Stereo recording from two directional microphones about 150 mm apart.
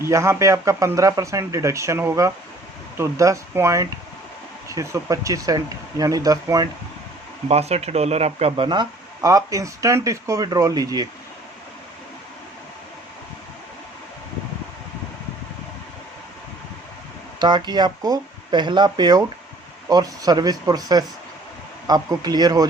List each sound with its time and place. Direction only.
0.0 s speech: 20° right (ahead or behind)
7.4 s speech: 45° right (ahead or behind); by 11.1 s 25° right (ahead or behind)
17.4 s speech: 30° right (ahead or behind)